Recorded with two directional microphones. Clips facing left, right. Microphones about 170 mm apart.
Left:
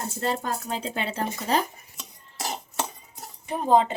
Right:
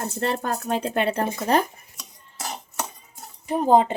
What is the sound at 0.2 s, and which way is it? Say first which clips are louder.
Speech: right 2 dB; 60° right (ahead or behind).